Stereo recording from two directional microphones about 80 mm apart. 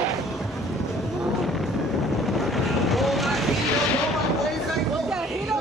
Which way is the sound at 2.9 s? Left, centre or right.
Centre.